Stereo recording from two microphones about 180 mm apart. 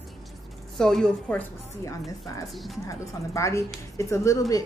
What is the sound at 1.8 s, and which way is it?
Speech, 20° left (ahead or behind).